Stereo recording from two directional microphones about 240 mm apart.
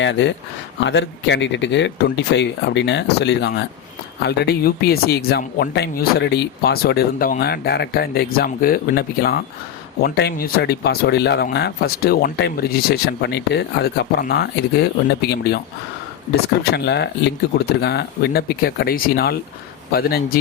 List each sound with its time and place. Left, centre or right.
0.0 s speech: left